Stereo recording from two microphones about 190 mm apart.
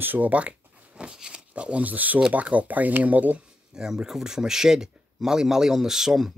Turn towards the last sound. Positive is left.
turn(degrees=0)  # may be behind; listen again after turning